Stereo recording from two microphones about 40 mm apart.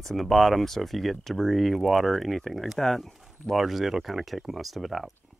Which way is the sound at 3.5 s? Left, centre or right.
Centre.